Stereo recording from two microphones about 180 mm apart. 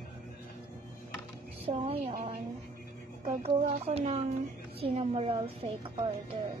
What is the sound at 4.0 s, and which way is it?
Speech, 35° right (ahead or behind).